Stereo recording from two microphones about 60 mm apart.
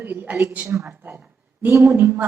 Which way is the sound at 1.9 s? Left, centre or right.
Right.